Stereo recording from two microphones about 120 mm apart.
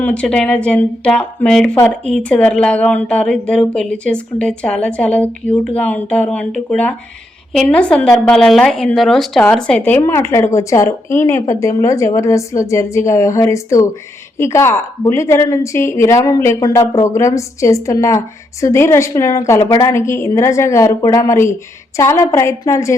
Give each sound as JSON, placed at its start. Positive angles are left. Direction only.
{"t": 0.0, "sound": "a woman's voice", "side_deg": 10}